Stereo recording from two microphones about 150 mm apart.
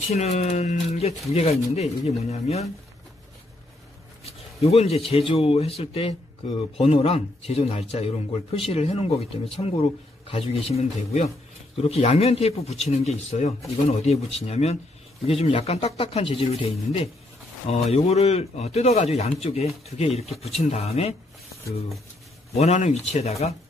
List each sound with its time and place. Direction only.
0.1 s a man's voice: 45° left (ahead or behind)
4.2 s a man's voice: 45° left (ahead or behind)
22.5 s a man's voice: 45° left (ahead or behind)